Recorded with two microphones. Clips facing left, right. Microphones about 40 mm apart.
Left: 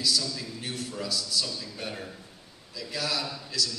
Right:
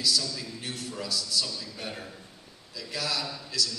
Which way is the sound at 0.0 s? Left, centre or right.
Centre.